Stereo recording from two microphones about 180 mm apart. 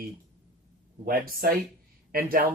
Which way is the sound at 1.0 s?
55° right (ahead or behind).